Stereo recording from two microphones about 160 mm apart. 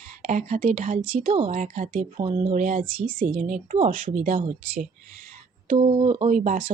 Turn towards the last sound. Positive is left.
turn(degrees=-55)  # may be behind; listen again after turning